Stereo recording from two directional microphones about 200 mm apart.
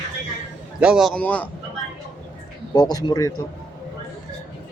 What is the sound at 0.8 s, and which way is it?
Speech, centre (ahead or behind).